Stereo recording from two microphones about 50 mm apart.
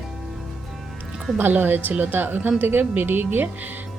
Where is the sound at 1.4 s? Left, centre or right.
Right.